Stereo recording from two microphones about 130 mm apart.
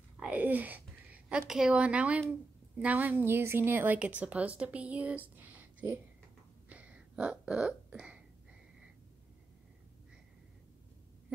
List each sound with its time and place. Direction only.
0.2 s a sound: 10° right (ahead or behind)
1.5 s a woman's voice: 5° right (ahead or behind)
6.7 s hiccup: 10° right (ahead or behind)